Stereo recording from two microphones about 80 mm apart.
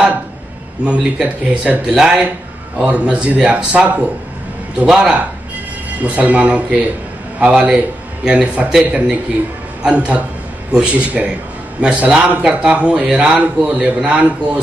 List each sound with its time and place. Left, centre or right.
0.8 s speech: centre